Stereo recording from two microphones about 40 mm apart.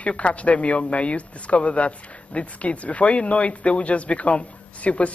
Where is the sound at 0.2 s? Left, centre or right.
Left.